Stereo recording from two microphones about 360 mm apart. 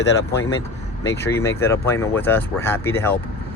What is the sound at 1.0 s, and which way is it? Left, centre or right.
Speech, centre.